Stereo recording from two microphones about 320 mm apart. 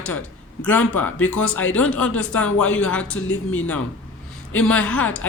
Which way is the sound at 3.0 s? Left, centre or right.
Left.